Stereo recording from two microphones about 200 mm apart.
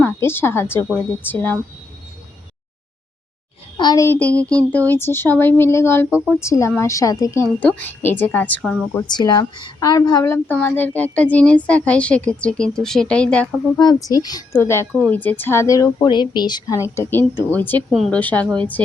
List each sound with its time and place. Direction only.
0.0 s a woman's voice: 10° left (ahead or behind)
3.8 s a woman's voice: 20° left (ahead or behind)
9.0 s a woman's voice: 20° left (ahead or behind); by 13.5 s 5° left (ahead or behind)
13.7 s a woman's voice: 20° left (ahead or behind)